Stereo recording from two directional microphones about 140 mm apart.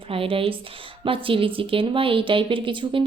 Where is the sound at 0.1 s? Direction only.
40° right (ahead or behind).